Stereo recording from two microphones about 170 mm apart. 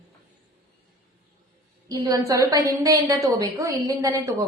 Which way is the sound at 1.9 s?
20° right (ahead or behind).